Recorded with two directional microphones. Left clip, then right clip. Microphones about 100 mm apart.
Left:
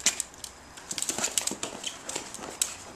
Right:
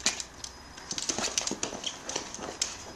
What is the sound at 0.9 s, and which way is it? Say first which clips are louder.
Dog: even; 5° right (ahead or behind).